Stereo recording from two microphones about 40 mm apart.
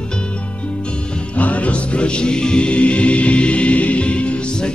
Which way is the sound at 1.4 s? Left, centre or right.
Left.